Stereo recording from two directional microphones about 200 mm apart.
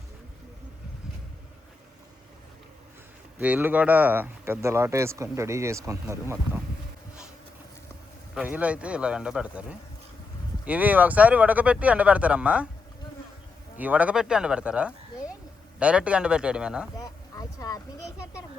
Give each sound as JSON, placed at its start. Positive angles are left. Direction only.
{"t": 3.3, "sound": "speech", "side_deg": -10}
{"t": 8.4, "sound": "speech", "side_deg": -5}
{"t": 13.7, "sound": "speech", "side_deg": -10}
{"t": 17.0, "sound": "a sound", "side_deg": 15}